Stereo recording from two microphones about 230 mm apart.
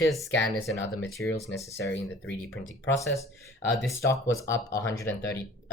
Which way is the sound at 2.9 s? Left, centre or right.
Centre.